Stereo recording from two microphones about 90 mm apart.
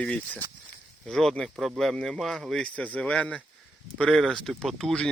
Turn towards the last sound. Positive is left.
turn(degrees=5)  # may be behind; listen again after turning